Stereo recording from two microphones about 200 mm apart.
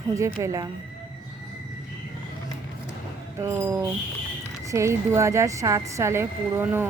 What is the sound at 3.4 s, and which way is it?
Speech, 15° right (ahead or behind).